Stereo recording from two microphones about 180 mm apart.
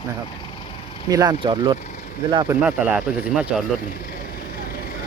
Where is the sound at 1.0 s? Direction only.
20° right (ahead or behind).